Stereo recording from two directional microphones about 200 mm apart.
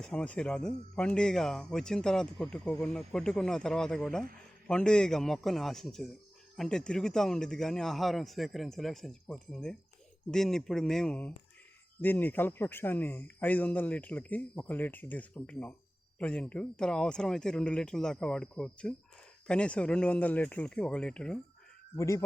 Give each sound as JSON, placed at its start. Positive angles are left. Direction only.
{"t": 0.0, "sound": "speech", "side_deg": 5}
{"t": 21.9, "sound": "speech", "side_deg": 15}